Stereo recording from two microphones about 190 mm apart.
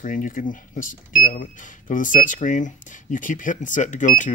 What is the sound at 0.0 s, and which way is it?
Speech, 45° left (ahead or behind).